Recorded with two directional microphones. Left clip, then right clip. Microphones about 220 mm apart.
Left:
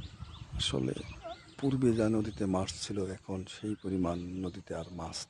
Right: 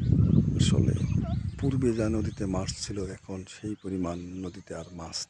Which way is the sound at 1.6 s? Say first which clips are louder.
Right 1 dB; centre (ahead or behind).